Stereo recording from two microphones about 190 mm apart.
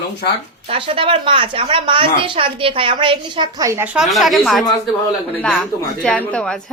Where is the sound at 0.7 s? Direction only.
30° right (ahead or behind).